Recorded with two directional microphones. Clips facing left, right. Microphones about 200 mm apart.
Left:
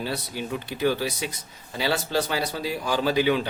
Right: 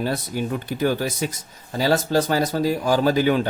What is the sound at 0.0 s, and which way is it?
Speech, 45° right (ahead or behind).